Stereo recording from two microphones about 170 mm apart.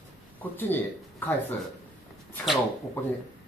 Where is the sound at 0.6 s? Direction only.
10° left (ahead or behind).